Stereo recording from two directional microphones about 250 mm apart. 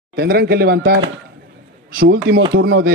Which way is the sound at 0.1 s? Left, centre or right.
Right.